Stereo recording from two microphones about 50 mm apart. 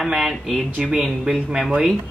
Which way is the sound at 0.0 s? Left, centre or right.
Centre.